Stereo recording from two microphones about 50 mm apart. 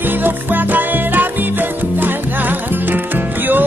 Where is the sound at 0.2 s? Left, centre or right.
Right.